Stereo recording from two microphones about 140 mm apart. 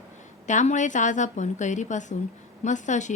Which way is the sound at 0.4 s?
60° left (ahead or behind).